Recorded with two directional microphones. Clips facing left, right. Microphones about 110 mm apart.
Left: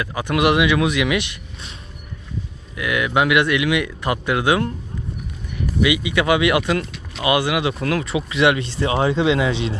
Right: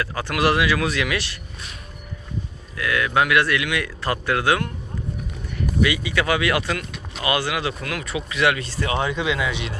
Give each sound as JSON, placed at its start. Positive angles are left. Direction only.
{"t": 0.0, "sound": "speech", "side_deg": 15}
{"t": 2.7, "sound": "speech", "side_deg": 20}
{"t": 5.8, "sound": "speech", "side_deg": 20}